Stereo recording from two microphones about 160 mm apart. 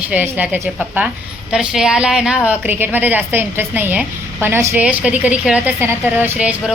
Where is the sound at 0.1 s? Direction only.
10° right (ahead or behind).